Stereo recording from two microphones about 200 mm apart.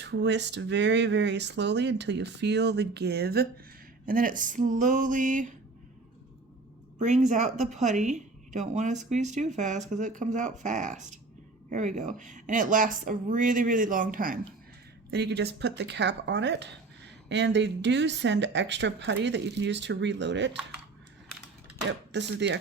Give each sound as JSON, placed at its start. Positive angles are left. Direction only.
{"t": 0.0, "sound": "a woman's voice", "side_deg": -60}
{"t": 7.0, "sound": "a woman's voice", "side_deg": -35}
{"t": 15.1, "sound": "speech", "side_deg": -55}
{"t": 21.8, "sound": "speech", "side_deg": -60}